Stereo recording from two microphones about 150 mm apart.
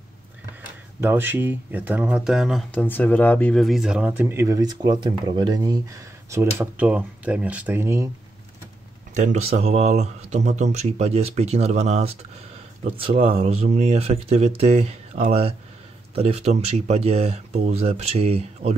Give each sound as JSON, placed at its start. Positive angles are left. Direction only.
{"t": 1.0, "sound": "speech", "side_deg": -15}
{"t": 2.7, "sound": "speech", "side_deg": 10}
{"t": 3.6, "sound": "speech", "side_deg": -5}
{"t": 9.1, "sound": "speech", "side_deg": -50}